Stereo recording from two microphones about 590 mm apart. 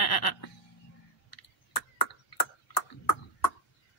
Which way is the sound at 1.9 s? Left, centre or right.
Left.